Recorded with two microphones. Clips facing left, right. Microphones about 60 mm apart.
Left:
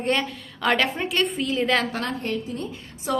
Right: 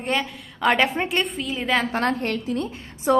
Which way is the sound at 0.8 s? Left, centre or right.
Right.